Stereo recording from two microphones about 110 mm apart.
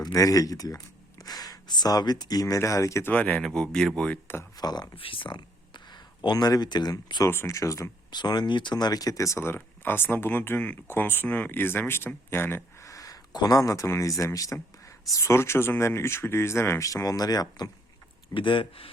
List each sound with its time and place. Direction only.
0.0 s speech: 35° left (ahead or behind)
3.1 s speech: 10° left (ahead or behind)
4.5 s speech: 40° left (ahead or behind)
4.9 s speech: 55° left (ahead or behind); by 7.3 s 35° left (ahead or behind)
7.3 s speech: 25° left (ahead or behind)
8.1 s speech: 40° left (ahead or behind)
18.3 s speech: 50° left (ahead or behind)